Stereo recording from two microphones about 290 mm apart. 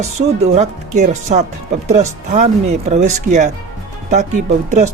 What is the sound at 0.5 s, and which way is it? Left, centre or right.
Speech, right.